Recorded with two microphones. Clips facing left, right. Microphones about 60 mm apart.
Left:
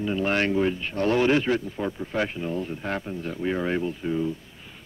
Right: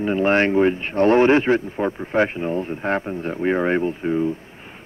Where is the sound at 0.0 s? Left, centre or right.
Right.